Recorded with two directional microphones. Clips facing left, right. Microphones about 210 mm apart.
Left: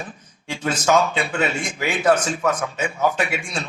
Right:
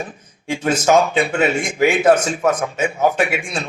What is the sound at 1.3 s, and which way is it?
Speech, 15° right (ahead or behind).